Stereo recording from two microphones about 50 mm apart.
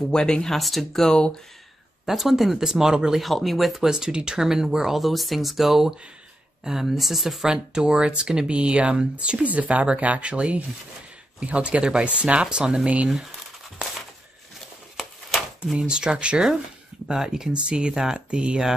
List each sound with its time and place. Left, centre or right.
0.1 s speech: centre
0.6 s speech: centre
1.1 s speech: centre
2.0 s speech: centre
3.2 s speech: centre
7.4 s speech: centre
15.6 s speech: centre